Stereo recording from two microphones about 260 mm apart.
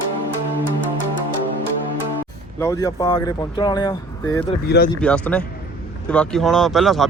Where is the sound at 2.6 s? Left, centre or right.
Centre.